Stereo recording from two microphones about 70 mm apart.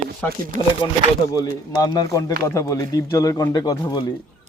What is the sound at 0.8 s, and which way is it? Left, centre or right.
Speech, left.